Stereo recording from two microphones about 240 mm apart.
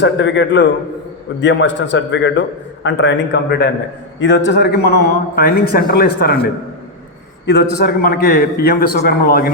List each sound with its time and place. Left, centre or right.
0.0 s a man's voice: left
7.9 s a man's voice: left